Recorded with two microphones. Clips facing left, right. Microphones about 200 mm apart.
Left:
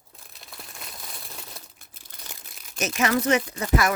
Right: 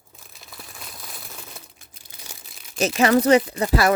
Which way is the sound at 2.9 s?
35° right (ahead or behind).